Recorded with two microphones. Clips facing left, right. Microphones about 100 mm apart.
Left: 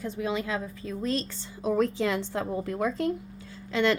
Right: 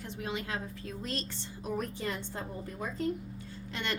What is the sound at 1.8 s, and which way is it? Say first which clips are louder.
A woman's voice: left 13 dB; 90° left.